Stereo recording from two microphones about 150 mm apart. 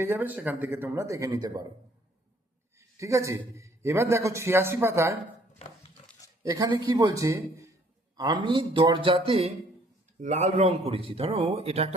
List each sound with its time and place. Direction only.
0.0 s speech: 15° right (ahead or behind)
2.7 s speech: 20° right (ahead or behind)
6.4 s speech: 25° right (ahead or behind); by 9.5 s 40° right (ahead or behind)
10.2 s speech: 55° right (ahead or behind)